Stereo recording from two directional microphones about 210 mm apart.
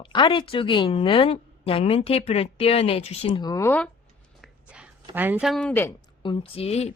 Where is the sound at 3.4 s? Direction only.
15° left (ahead or behind).